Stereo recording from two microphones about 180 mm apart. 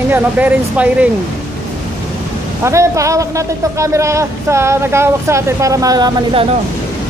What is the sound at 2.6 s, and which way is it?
A man's voice, 15° right (ahead or behind).